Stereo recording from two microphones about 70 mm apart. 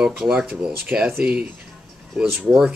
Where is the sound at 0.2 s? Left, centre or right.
Centre.